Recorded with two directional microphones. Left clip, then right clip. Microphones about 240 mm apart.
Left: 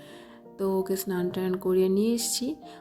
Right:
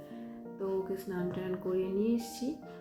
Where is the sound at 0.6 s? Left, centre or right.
Left.